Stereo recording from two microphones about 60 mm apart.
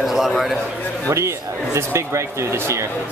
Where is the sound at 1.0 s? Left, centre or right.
Right.